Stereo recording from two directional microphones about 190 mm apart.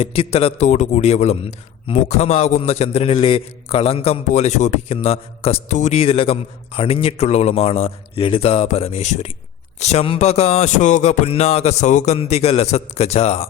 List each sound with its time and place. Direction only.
0.0 s a man's voice: 30° left (ahead or behind)